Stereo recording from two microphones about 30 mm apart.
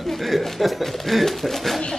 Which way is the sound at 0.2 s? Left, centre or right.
Centre.